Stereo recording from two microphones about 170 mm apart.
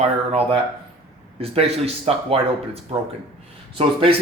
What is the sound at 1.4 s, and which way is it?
A man's voice, 35° right (ahead or behind).